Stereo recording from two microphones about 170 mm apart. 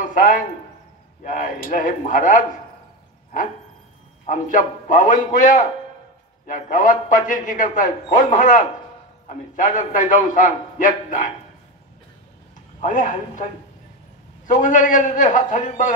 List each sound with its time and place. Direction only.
0.0 s a sound: 50° left (ahead or behind)
1.6 s a man's voice: 55° left (ahead or behind)
4.3 s a man's voice: 50° left (ahead or behind)
12.8 s a man's voice: 50° left (ahead or behind)
14.5 s a man's voice: 50° left (ahead or behind)